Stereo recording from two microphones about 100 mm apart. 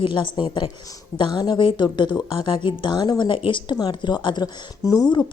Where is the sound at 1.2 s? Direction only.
45° left (ahead or behind).